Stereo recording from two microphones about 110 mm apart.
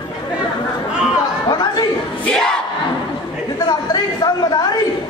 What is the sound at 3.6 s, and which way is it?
Chatter, 40° left (ahead or behind).